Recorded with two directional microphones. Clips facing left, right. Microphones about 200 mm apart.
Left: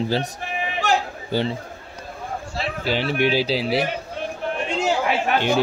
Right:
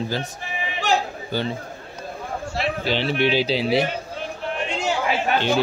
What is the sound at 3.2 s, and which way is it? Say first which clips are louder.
Speech: even; 10° left (ahead or behind).